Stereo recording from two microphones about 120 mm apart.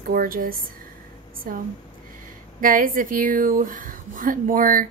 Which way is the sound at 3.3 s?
90° right.